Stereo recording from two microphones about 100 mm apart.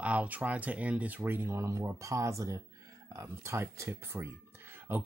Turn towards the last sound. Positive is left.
turn(degrees=-20)  # may be behind; listen again after turning